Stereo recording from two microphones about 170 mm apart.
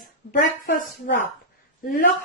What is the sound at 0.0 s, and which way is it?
A woman's voice, 60° left (ahead or behind).